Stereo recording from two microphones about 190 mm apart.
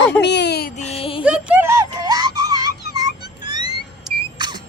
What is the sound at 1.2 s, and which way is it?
Music, 5° right (ahead or behind).